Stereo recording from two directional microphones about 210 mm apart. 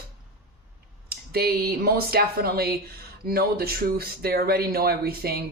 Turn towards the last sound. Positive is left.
turn(degrees=-50)  # may be behind; listen again after turning